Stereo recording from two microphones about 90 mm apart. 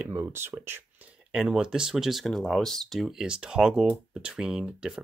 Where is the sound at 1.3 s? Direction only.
10° right (ahead or behind).